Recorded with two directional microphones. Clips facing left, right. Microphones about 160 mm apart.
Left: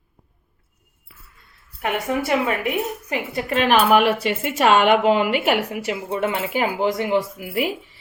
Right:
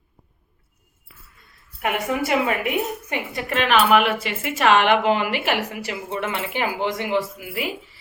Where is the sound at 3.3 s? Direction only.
35° left (ahead or behind).